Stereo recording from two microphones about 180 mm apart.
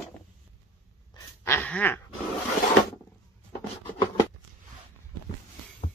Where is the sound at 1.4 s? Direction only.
10° left (ahead or behind).